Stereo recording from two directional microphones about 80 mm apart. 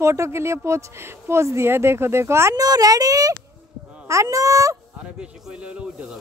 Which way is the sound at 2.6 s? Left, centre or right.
Right.